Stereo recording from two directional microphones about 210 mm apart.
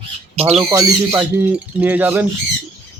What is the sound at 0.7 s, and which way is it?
Speech, 15° right (ahead or behind).